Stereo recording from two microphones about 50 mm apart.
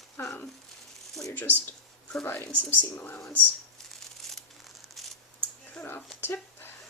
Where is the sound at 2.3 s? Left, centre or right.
Left.